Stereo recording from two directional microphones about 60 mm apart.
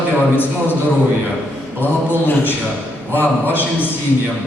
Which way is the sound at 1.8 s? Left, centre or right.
Left.